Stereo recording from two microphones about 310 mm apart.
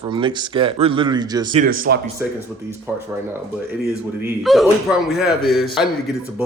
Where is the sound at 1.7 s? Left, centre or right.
Right.